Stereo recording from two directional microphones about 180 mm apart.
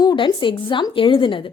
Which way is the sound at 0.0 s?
25° left (ahead or behind).